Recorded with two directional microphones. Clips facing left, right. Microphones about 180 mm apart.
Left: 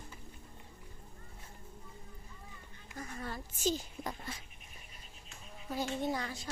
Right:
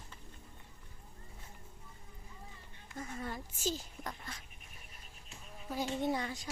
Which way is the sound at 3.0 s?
20° right (ahead or behind).